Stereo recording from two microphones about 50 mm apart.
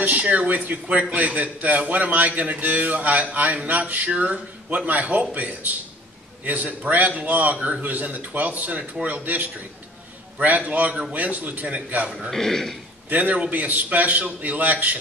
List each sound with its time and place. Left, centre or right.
0.0 s a man's voice: right
12.3 s speech: centre
13.1 s a man's voice: right